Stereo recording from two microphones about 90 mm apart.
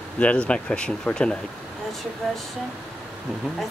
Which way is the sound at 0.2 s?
10° left (ahead or behind).